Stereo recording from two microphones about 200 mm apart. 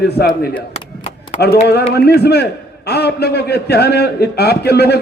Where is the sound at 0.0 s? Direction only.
50° left (ahead or behind).